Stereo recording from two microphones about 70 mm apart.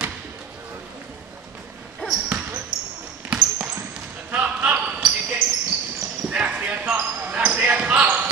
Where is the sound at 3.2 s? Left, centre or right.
Centre.